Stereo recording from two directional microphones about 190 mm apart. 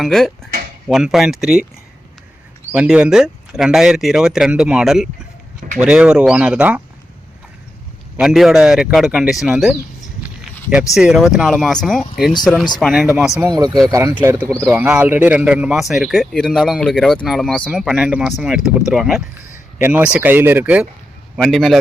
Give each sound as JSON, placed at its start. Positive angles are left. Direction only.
{"t": 0.0, "sound": "speech", "side_deg": 0}
{"t": 2.7, "sound": "speech", "side_deg": -5}
{"t": 8.1, "sound": "speech", "side_deg": 0}
{"t": 10.2, "sound": "a sound", "side_deg": -5}
{"t": 10.9, "sound": "speech", "side_deg": -5}
{"t": 13.5, "sound": "speech", "side_deg": -20}
{"t": 21.3, "sound": "speech", "side_deg": 5}